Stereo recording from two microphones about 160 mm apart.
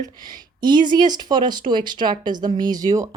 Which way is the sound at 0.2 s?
25° right (ahead or behind).